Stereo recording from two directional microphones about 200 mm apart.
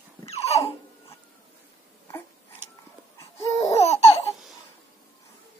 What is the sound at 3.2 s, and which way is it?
Laughter, 15° left (ahead or behind).